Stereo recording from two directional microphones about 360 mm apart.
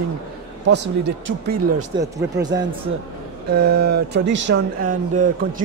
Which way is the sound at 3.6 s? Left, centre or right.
Right.